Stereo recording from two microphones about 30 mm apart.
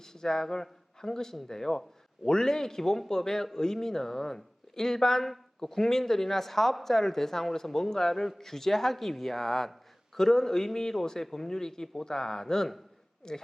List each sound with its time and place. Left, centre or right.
0.0 s a man's voice: centre